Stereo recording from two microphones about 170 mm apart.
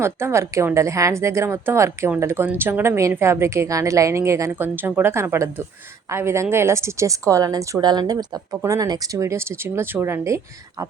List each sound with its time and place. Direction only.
0.0 s a woman's voice: 15° right (ahead or behind)